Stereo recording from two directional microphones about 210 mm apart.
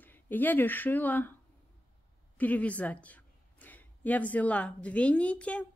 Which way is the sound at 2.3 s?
5° left (ahead or behind).